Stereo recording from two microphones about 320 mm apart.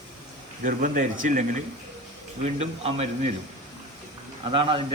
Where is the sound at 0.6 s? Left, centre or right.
Right.